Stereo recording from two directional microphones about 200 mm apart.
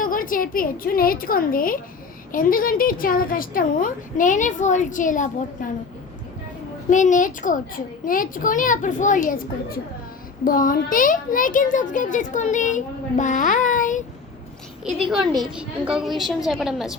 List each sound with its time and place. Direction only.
0.0 s a woman's voice: 45° left (ahead or behind)
6.9 s a child's voice: 40° left (ahead or behind)
15.5 s a woman's voice: 5° right (ahead or behind)